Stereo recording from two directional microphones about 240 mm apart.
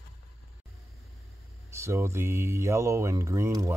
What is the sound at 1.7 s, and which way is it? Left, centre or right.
Speech, centre.